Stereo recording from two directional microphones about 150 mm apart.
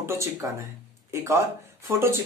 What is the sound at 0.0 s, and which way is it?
Speech, 20° right (ahead or behind).